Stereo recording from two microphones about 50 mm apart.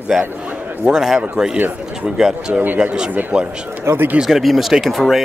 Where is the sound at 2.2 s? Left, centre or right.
Centre.